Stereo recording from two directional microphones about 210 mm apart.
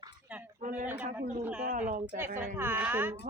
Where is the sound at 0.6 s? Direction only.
35° right (ahead or behind).